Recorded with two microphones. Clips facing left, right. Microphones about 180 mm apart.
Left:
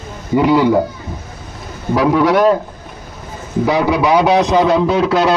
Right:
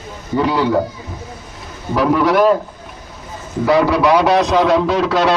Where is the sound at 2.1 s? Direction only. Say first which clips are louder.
Even; centre (ahead or behind).